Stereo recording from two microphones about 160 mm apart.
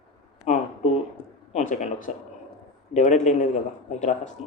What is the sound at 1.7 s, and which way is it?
Speech, 50° left (ahead or behind).